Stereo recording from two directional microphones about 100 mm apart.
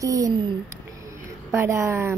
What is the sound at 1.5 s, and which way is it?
Speech, 25° right (ahead or behind).